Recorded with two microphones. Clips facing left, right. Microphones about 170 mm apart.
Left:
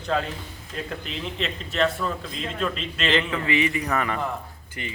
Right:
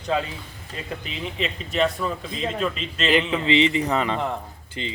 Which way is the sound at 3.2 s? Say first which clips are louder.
Right 4 dB; 20° right (ahead or behind).